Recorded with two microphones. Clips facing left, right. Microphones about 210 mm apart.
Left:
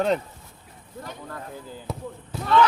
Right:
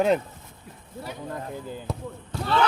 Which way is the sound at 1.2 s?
20° right (ahead or behind).